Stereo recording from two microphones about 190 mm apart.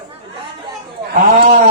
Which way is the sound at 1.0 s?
55° right (ahead or behind).